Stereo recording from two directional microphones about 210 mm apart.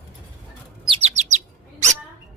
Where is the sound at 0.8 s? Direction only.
25° right (ahead or behind).